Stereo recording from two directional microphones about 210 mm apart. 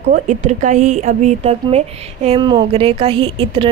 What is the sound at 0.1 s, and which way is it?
A woman's voice, 35° right (ahead or behind).